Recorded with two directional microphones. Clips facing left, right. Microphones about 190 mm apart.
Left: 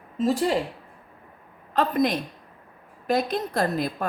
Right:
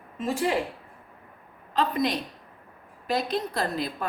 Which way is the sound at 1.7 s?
50° left (ahead or behind).